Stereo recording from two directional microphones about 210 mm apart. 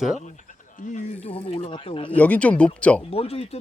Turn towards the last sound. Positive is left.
turn(degrees=30)  # may be behind; listen again after turning